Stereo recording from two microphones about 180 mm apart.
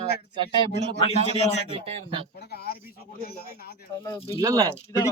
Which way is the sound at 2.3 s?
60° left (ahead or behind).